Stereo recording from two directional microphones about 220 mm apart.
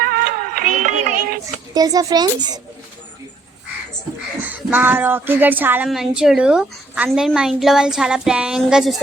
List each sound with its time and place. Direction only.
0.0 s music: 40° right (ahead or behind)
1.7 s speech: 15° right (ahead or behind)
4.4 s speech: 5° right (ahead or behind)